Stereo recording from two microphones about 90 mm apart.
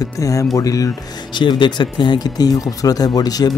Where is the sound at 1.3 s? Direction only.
60° left (ahead or behind).